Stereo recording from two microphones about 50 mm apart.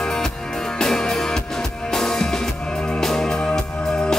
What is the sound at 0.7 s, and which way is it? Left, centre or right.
Music, centre.